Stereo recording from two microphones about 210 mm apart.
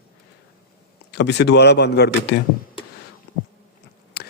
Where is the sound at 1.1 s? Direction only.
55° left (ahead or behind).